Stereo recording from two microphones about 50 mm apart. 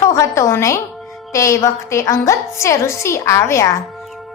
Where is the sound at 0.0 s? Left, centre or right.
Left.